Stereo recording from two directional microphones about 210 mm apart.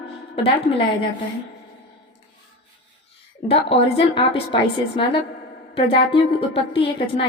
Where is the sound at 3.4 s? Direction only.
25° left (ahead or behind).